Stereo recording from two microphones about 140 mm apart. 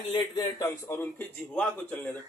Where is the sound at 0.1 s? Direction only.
20° left (ahead or behind).